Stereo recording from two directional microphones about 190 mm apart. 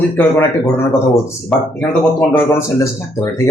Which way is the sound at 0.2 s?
10° left (ahead or behind).